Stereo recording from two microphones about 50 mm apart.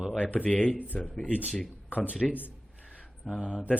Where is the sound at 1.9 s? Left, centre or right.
Left.